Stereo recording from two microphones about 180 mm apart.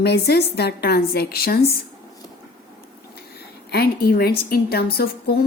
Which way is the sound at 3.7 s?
60° left (ahead or behind).